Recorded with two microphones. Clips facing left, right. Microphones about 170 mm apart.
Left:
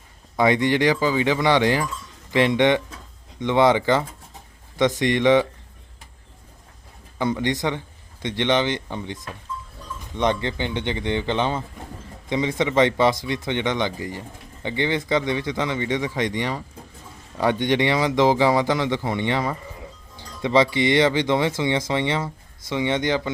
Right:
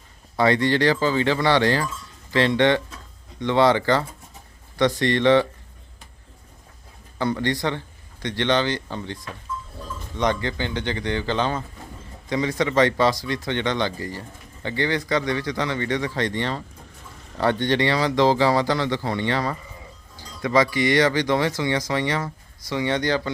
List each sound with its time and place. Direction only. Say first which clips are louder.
0.3 s speech: even; 15° left (ahead or behind)
7.2 s speech: left 1 dB; 20° left (ahead or behind)